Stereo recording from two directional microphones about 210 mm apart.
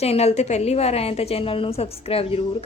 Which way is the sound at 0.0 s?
30° left (ahead or behind).